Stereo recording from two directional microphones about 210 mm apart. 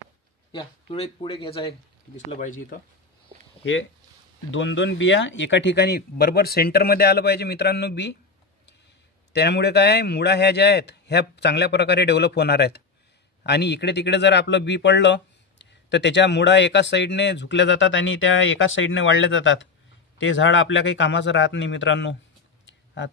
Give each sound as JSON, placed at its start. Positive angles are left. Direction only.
{"t": 0.5, "sound": "speech", "side_deg": 25}
{"t": 4.5, "sound": "speech", "side_deg": 60}
{"t": 9.3, "sound": "a man's voice", "side_deg": 50}